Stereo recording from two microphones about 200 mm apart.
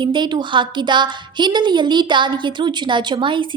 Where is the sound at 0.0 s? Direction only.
20° right (ahead or behind).